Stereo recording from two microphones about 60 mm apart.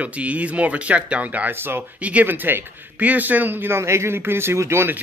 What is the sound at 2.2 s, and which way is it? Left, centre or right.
Speech, right.